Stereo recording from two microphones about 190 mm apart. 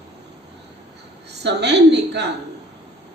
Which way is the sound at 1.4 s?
65° right (ahead or behind).